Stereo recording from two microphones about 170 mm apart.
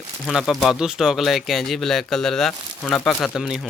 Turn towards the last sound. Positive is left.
turn(degrees=0)  # may be behind; listen again after turning